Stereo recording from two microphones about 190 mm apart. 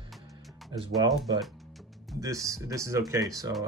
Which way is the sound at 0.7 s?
20° right (ahead or behind).